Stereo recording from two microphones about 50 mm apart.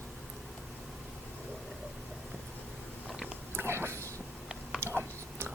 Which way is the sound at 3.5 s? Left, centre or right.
Right.